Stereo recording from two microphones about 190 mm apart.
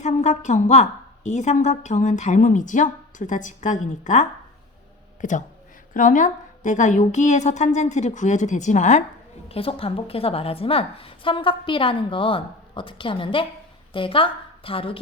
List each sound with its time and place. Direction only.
0.0 s a woman's voice: 40° left (ahead or behind)